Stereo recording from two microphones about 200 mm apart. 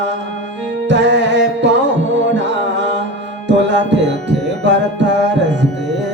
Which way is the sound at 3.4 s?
60° right (ahead or behind).